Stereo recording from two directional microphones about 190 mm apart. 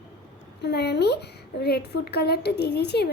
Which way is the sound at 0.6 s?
60° left (ahead or behind).